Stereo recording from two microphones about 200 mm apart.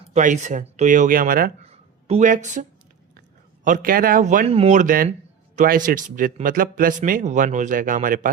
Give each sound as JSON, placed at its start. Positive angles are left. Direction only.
{"t": 0.1, "sound": "speech", "side_deg": -35}
{"t": 1.6, "sound": "a sound", "side_deg": -30}
{"t": 3.2, "sound": "a man's voice", "side_deg": -45}